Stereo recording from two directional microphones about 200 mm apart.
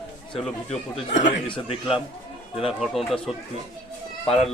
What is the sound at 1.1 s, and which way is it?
Speech, 35° left (ahead or behind).